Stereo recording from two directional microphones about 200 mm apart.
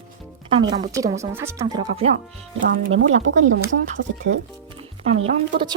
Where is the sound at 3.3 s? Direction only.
70° right (ahead or behind).